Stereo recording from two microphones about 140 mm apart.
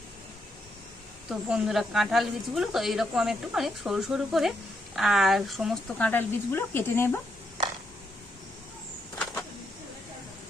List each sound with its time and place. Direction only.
1.3 s speech: 5° right (ahead or behind)
6.0 s speech: 10° left (ahead or behind)